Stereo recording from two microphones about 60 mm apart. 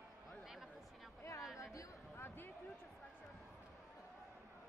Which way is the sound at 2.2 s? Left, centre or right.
Left.